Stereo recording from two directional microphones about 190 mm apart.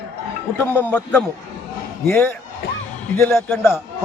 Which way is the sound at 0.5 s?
10° left (ahead or behind).